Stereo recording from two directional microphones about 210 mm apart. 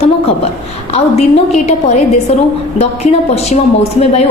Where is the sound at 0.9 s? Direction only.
30° left (ahead or behind).